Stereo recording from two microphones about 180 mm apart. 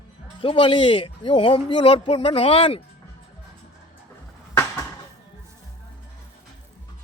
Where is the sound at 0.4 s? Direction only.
30° left (ahead or behind).